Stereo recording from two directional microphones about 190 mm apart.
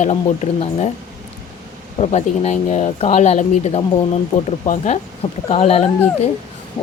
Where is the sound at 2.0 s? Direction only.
35° left (ahead or behind).